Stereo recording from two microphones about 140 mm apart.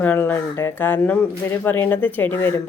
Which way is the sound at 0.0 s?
15° left (ahead or behind).